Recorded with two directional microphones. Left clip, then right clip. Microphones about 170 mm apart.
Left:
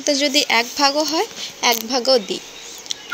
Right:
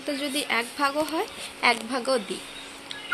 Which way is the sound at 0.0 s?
35° left (ahead or behind).